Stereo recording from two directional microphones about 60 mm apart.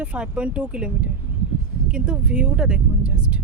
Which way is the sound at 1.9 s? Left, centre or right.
Centre.